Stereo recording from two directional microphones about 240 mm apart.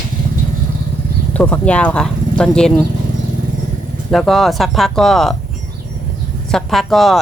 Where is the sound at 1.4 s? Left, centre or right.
Centre.